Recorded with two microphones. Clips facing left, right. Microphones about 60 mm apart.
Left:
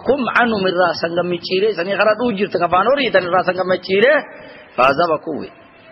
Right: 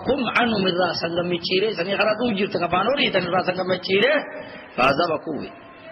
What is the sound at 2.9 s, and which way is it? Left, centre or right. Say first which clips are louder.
Speech: left 7 dB; left.